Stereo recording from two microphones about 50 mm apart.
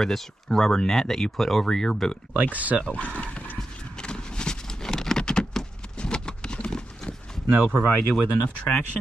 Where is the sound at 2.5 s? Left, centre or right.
Right.